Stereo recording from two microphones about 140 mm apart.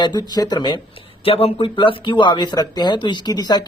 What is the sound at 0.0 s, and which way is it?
Speech, 30° left (ahead or behind).